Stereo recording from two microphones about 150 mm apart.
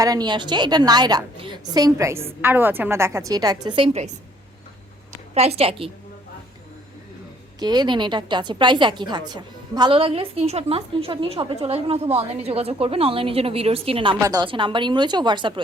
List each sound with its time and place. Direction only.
0.0 s a woman's voice: 25° right (ahead or behind)
5.3 s a woman's voice: 45° right (ahead or behind)
7.6 s a woman's voice: 30° right (ahead or behind)
14.2 s a woman's voice: 25° right (ahead or behind)